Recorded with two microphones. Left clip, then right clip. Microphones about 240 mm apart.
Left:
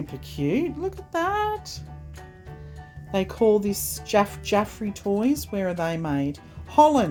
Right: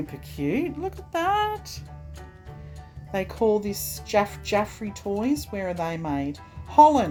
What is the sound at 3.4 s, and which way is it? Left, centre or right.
Speech, left.